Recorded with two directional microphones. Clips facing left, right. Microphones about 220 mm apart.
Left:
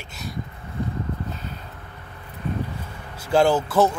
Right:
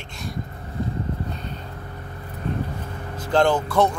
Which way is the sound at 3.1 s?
10° left (ahead or behind).